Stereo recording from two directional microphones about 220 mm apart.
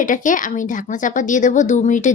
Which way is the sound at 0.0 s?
35° left (ahead or behind).